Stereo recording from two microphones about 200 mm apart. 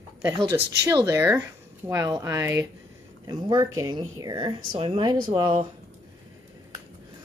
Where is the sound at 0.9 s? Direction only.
15° right (ahead or behind).